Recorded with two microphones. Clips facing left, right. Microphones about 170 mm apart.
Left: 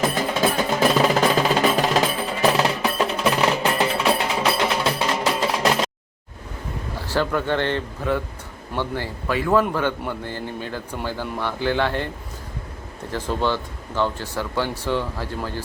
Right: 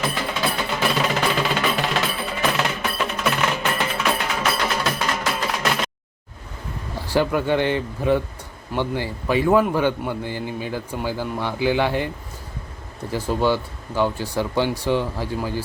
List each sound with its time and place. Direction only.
0.1 s music: 45° left (ahead or behind)
7.1 s speech: 15° right (ahead or behind)